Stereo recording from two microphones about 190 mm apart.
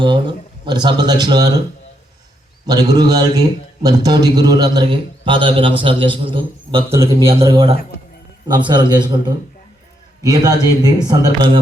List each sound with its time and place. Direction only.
0.0 s a man's voice: 25° right (ahead or behind)
2.6 s a man's voice: 20° right (ahead or behind)
6.9 s a man's voice: 15° right (ahead or behind)